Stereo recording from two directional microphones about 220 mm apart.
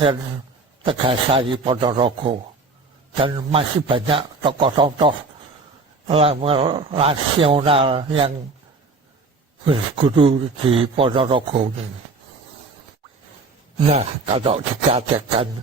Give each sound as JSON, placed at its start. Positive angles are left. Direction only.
{"t": 0.9, "sound": "speech", "side_deg": -25}
{"t": 9.6, "sound": "speech", "side_deg": -25}
{"t": 13.7, "sound": "speech", "side_deg": -25}